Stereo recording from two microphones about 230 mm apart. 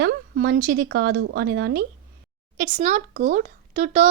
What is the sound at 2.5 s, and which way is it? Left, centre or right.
Speech, right.